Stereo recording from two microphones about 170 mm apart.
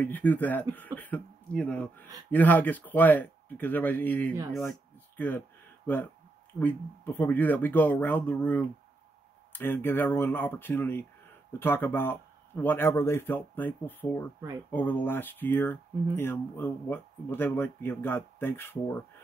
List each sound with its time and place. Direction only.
0.0 s speech: 10° left (ahead or behind)
6.6 s speech: 10° left (ahead or behind)